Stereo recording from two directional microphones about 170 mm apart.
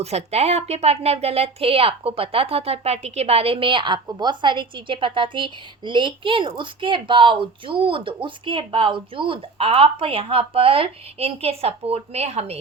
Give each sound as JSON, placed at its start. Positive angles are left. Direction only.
{"t": 0.0, "sound": "a woman's voice", "side_deg": -40}